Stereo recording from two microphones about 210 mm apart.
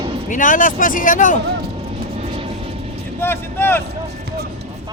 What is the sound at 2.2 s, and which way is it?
Vehicle, 25° right (ahead or behind).